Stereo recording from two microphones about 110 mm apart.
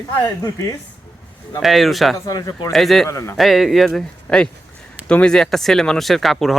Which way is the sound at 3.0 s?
25° left (ahead or behind).